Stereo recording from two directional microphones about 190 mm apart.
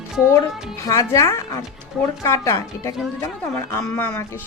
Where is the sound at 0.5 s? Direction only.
Centre (ahead or behind).